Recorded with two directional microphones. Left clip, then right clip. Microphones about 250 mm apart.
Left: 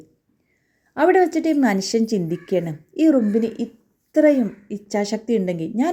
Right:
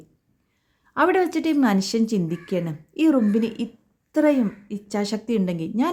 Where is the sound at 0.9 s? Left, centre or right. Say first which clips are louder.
Left 3 dB; centre.